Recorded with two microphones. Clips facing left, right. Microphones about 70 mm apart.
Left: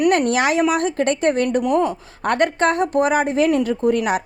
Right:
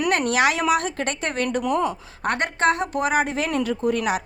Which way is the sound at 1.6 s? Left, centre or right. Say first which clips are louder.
Left 4 dB; centre.